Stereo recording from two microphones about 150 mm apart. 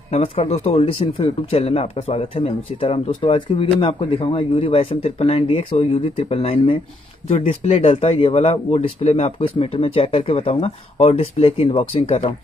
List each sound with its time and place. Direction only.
0.1 s speech: 45° left (ahead or behind)